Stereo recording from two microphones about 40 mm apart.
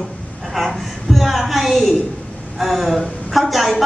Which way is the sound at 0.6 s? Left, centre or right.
Centre.